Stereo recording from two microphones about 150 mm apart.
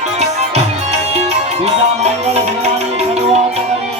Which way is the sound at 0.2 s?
45° right (ahead or behind).